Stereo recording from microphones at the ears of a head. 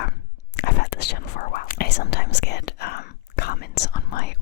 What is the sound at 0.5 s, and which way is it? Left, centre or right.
Whispering, left.